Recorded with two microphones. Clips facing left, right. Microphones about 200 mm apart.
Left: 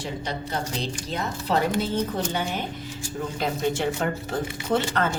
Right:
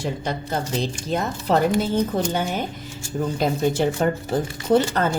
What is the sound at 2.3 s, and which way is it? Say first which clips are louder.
A woman's voice: right 4 dB; 45° right (ahead or behind).